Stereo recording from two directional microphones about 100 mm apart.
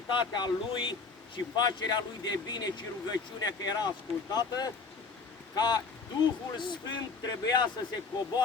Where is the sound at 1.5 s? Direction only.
45° left (ahead or behind).